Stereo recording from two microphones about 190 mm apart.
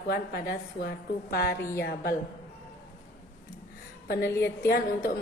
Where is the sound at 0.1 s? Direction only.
55° left (ahead or behind).